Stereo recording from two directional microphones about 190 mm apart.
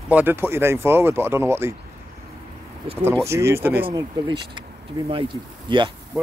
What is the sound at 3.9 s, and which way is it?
Speech, 20° right (ahead or behind).